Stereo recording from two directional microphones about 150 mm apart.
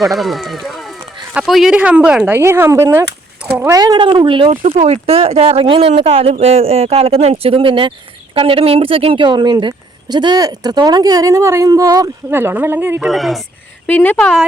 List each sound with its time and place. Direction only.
0.0 s speech: centre (ahead or behind); by 12.1 s 25° right (ahead or behind)
12.3 s speech: 15° right (ahead or behind)
13.1 s speech: centre (ahead or behind)
13.8 s speech: 10° left (ahead or behind)